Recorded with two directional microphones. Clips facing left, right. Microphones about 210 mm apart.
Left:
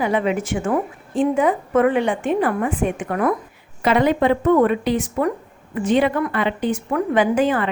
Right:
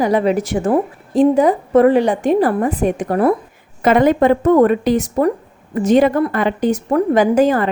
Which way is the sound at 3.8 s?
45° right (ahead or behind).